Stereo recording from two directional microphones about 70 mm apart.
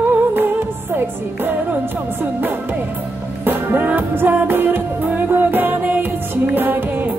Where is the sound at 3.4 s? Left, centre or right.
Right.